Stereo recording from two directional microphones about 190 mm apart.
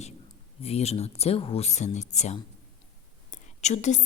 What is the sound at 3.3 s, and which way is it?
Whispering, 40° left (ahead or behind).